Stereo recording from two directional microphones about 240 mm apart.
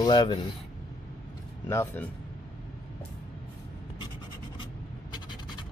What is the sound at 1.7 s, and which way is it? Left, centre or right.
Speech, centre.